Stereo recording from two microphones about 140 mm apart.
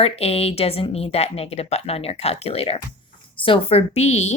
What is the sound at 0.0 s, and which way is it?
Speech, 45° left (ahead or behind).